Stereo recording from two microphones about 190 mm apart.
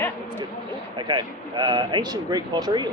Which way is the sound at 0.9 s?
25° right (ahead or behind).